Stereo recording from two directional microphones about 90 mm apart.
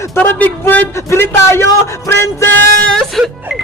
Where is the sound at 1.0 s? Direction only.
30° left (ahead or behind).